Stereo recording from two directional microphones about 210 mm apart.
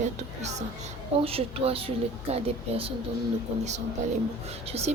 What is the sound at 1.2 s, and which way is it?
A woman's voice, 25° right (ahead or behind).